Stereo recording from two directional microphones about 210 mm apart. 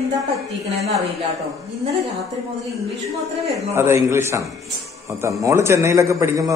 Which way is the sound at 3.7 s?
15° right (ahead or behind).